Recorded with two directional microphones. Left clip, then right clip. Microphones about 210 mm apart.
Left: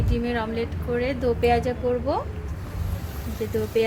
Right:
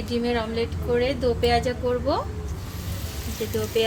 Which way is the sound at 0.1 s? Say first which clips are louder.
Right 2 dB; 10° left (ahead or behind).